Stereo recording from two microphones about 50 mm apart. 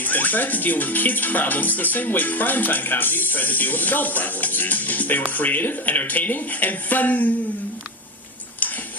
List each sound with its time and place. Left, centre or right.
0.0 s speech: left